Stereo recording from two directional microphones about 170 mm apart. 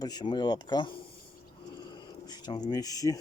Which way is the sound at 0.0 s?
25° left (ahead or behind).